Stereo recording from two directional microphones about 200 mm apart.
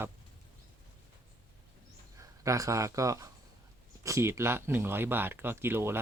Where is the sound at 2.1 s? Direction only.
15° right (ahead or behind).